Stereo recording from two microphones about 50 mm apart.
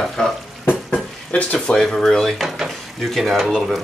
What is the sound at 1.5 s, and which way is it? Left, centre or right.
Speech, centre.